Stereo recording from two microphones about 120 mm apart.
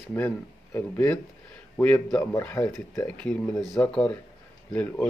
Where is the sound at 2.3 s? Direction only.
25° left (ahead or behind).